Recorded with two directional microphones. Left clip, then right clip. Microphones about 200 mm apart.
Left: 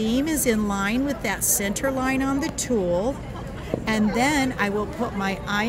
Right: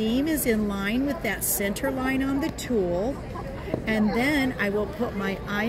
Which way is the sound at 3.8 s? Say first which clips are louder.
Left 3 dB; 50° left (ahead or behind).